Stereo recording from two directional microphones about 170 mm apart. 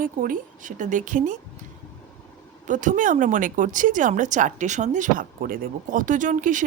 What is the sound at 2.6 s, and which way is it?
Speech, 50° right (ahead or behind).